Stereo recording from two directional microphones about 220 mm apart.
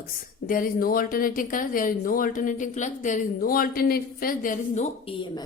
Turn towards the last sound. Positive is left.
turn(degrees=30)  # may be behind; listen again after turning